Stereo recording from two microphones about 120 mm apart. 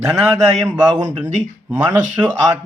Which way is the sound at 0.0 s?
10° right (ahead or behind).